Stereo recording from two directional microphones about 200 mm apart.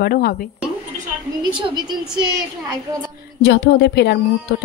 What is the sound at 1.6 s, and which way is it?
Speech, 25° right (ahead or behind).